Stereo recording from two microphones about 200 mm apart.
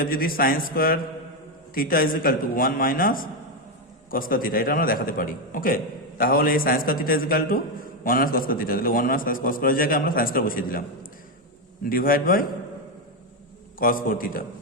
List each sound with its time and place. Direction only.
0.0 s a man's voice: 45° left (ahead or behind)
13.7 s a man's voice: 45° left (ahead or behind)